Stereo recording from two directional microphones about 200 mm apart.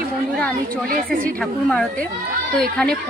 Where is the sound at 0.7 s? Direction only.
45° right (ahead or behind).